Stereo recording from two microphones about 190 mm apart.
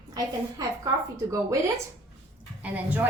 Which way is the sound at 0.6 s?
20° right (ahead or behind).